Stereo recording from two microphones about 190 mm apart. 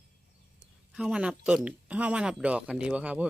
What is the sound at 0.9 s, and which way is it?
Speech, 5° right (ahead or behind).